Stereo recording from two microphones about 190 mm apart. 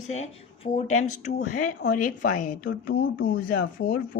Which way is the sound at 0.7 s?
40° left (ahead or behind).